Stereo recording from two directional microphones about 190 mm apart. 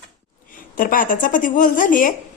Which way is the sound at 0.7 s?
45° left (ahead or behind).